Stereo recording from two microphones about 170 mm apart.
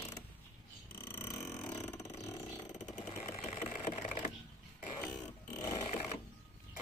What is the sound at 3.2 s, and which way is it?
Sewing machine, 40° left (ahead or behind).